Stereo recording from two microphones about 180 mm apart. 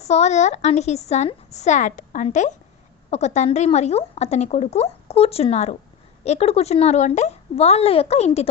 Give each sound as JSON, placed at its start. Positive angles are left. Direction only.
{"t": 0.0, "sound": "speech", "side_deg": 40}